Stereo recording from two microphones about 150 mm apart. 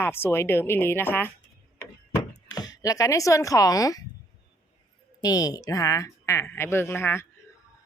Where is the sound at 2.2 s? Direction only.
25° left (ahead or behind).